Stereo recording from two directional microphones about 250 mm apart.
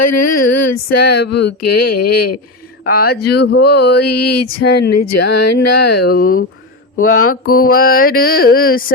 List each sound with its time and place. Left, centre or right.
0.0 s speech: left
1.6 s speech: left
2.8 s mantra: left
3.1 s mantra: left
4.0 s a sound: left
4.9 s speech: left
6.0 s mantra: left
7.1 s mantra: left
7.5 s mantra: left